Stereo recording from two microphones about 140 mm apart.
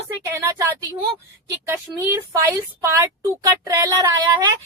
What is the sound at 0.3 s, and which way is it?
Speech, 15° right (ahead or behind).